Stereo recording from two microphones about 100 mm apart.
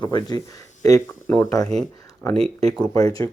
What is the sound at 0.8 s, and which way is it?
Speech, 30° left (ahead or behind).